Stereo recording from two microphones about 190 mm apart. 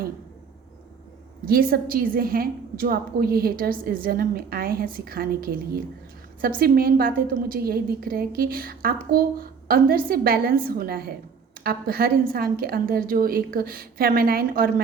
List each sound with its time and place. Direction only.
1.5 s a woman's voice: 50° right (ahead or behind)